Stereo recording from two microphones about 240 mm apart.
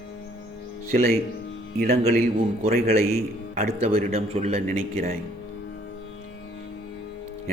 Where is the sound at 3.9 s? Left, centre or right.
Right.